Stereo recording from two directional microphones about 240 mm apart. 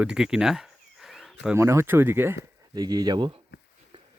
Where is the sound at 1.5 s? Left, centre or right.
Centre.